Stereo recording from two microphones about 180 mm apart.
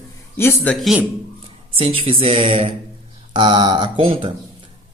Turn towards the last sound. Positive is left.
turn(degrees=-30)  # may be behind; listen again after turning